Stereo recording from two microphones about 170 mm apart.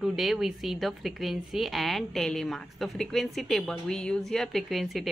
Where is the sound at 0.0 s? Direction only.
Centre (ahead or behind).